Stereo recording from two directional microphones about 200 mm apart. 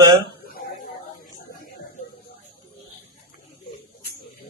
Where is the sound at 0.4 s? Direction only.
45° left (ahead or behind).